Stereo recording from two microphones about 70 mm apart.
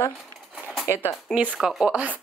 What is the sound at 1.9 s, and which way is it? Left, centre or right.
Speech, right.